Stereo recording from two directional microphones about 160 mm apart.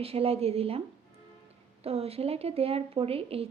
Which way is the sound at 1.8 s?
40° right (ahead or behind).